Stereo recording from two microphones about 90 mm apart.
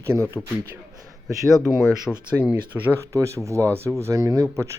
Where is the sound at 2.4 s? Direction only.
15° right (ahead or behind).